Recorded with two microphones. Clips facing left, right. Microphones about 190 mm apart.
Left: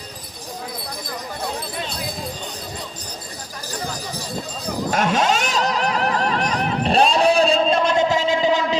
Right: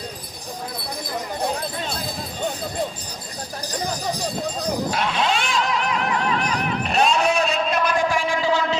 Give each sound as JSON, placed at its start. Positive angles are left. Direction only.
{"t": 4.9, "sound": "vehicle", "side_deg": 45}